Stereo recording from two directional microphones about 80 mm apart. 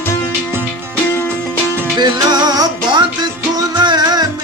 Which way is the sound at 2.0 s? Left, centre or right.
Right.